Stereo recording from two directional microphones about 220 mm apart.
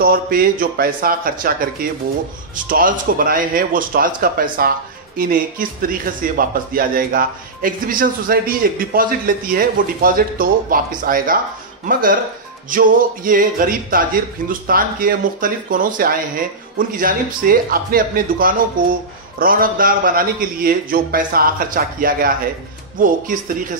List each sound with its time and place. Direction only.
0.0 s speech: 40° right (ahead or behind)
2.5 s speech: 40° right (ahead or behind)